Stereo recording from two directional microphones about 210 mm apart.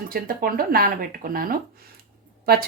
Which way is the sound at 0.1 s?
45° right (ahead or behind).